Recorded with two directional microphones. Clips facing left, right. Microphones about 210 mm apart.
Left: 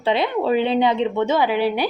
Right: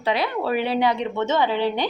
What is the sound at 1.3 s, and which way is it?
Speech, 10° left (ahead or behind).